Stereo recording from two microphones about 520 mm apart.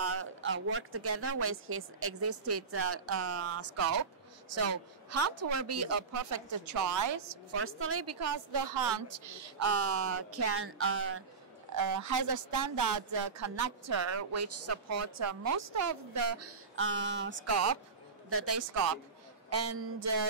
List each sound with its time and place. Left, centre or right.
0.2 s speech: right
11.7 s a woman's voice: right